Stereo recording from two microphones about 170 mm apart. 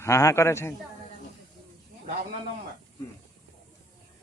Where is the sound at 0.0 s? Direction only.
20° left (ahead or behind).